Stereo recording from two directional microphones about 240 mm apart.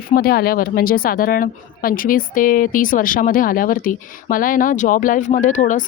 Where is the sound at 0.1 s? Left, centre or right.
Left.